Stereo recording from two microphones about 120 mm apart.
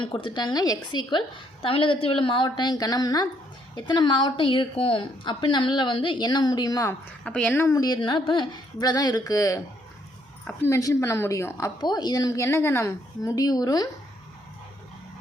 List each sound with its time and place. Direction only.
0.0 s a woman's voice: 45° left (ahead or behind)
1.6 s a woman's voice: 50° left (ahead or behind); by 6.9 s 30° left (ahead or behind)
7.3 s speech: 10° left (ahead or behind)
7.5 s a woman's voice: 25° left (ahead or behind)